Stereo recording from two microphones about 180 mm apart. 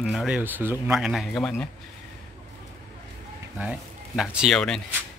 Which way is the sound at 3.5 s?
5° right (ahead or behind).